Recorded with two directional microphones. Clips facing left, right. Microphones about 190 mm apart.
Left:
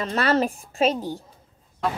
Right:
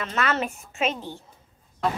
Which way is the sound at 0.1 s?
35° left (ahead or behind).